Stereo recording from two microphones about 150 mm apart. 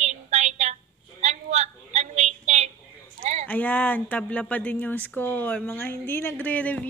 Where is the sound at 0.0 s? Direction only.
50° right (ahead or behind).